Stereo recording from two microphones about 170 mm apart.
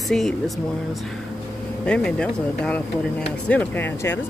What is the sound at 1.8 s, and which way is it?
Speech, 5° left (ahead or behind).